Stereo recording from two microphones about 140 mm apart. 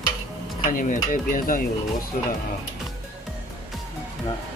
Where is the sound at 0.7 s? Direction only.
70° left (ahead or behind).